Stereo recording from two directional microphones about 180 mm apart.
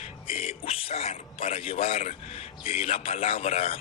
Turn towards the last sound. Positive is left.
turn(degrees=35)  # may be behind; listen again after turning